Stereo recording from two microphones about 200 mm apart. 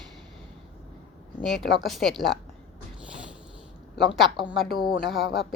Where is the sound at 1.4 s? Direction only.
Centre (ahead or behind).